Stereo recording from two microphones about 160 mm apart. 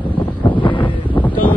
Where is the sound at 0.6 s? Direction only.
30° left (ahead or behind).